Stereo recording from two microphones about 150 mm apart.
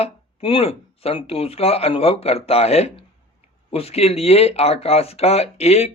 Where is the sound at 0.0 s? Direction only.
40° left (ahead or behind).